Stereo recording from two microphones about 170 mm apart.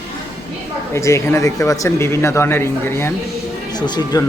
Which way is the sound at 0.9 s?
15° left (ahead or behind).